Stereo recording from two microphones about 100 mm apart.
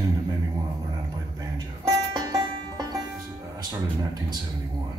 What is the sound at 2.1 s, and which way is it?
Music, 45° right (ahead or behind).